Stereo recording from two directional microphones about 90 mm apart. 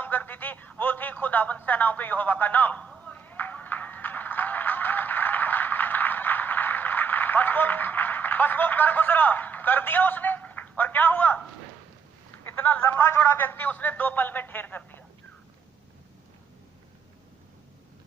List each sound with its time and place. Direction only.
0.0 s speech: 20° left (ahead or behind)
3.0 s a sound: 15° left (ahead or behind)
12.3 s a man's voice: 20° left (ahead or behind)